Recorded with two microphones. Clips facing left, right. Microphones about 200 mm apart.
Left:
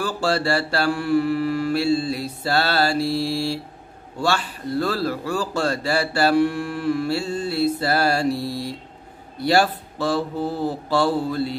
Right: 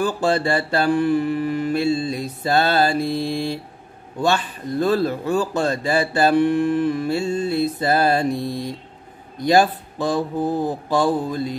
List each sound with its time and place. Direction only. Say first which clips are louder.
0.0 s a man's voice: right 3 dB; 20° right (ahead or behind)